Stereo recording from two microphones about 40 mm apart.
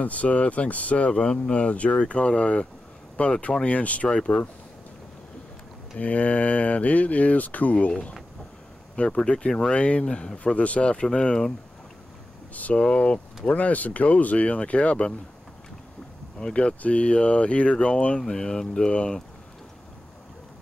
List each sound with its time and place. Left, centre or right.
0.0 s speech: left
4.1 s speech: left
5.9 s speech: left
12.5 s speech: left
12.8 s speech: left
13.5 s speech: left
16.3 s speech: left